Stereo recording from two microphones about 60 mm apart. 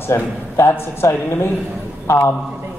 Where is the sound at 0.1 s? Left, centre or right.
Left.